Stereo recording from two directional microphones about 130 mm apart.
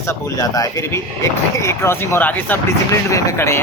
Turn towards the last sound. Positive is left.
turn(degrees=20)  # may be behind; listen again after turning